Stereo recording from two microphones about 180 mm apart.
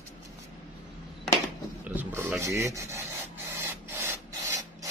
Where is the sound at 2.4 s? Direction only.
15° right (ahead or behind).